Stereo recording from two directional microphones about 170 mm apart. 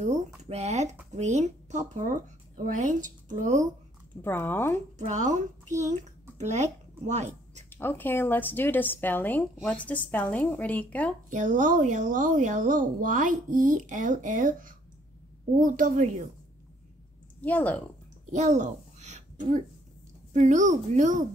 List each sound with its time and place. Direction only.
0.0 s speech: 45° right (ahead or behind)
4.2 s a woman's voice: 10° left (ahead or behind)
4.9 s speech: 45° right (ahead or behind)
7.7 s a woman's voice: 10° left (ahead or behind)
11.2 s speech: 50° right (ahead or behind)
17.4 s a woman's voice: 10° left (ahead or behind)
18.3 s a child's voice: 45° right (ahead or behind)